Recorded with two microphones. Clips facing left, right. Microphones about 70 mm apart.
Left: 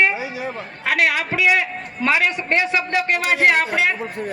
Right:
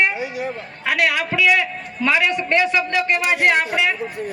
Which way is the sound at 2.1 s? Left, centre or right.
Left.